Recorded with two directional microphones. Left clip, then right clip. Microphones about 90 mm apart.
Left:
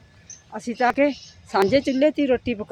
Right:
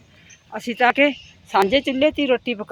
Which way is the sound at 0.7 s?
15° right (ahead or behind).